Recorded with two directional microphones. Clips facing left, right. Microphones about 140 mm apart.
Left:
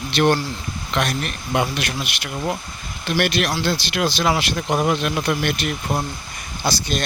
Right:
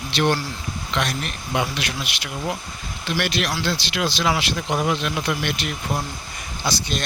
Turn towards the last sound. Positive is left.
turn(degrees=45)  # may be behind; listen again after turning